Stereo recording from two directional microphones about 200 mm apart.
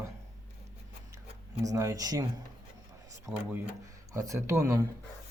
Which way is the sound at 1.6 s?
15° right (ahead or behind).